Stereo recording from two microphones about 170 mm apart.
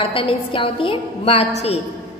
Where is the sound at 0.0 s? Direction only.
30° left (ahead or behind).